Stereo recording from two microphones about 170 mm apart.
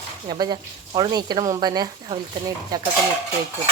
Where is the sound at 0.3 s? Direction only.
25° right (ahead or behind).